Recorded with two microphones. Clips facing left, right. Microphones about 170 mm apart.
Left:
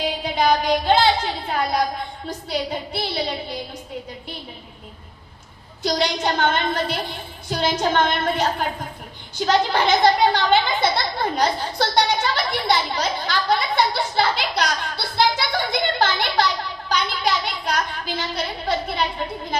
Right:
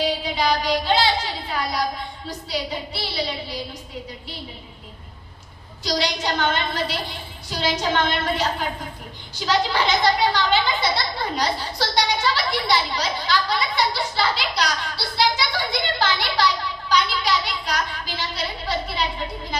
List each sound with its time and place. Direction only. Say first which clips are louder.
0.0 s a sound: left 1 dB; 50° left (ahead or behind)
2.2 s a child's voice: left 2 dB; 50° left (ahead or behind)
5.8 s a child's voice: left 3 dB; 50° left (ahead or behind)